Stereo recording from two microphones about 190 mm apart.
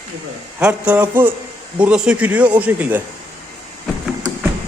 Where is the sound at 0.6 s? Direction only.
5° right (ahead or behind).